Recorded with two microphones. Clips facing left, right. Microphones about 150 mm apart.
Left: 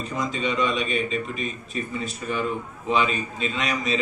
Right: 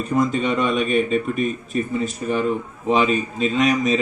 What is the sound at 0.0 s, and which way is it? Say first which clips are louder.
A man's voice: right 7 dB; 50° right (ahead or behind).